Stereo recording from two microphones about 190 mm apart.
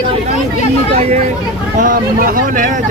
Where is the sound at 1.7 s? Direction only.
45° right (ahead or behind).